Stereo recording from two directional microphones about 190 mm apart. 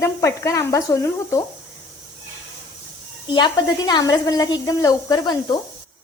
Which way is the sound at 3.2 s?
25° left (ahead or behind).